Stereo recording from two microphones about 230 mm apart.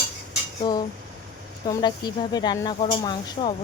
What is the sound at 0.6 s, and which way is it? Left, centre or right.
Cutlery, centre.